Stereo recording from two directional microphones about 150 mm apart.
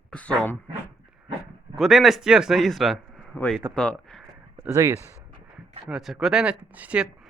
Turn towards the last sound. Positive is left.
turn(degrees=-5)  # may be behind; listen again after turning